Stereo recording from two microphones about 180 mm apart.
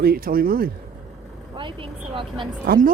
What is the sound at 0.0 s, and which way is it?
Speech, 55° right (ahead or behind).